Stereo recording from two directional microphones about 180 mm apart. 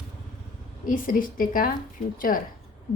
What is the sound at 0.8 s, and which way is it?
A woman's voice, 50° left (ahead or behind).